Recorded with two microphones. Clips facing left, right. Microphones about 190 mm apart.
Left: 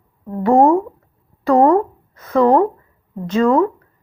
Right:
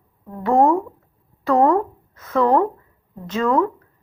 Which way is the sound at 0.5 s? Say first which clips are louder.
Left 3 dB; 30° left (ahead or behind).